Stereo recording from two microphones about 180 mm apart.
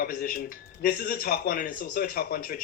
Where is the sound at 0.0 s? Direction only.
55° left (ahead or behind).